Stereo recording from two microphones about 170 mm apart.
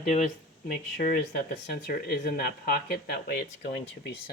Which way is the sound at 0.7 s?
55° left (ahead or behind).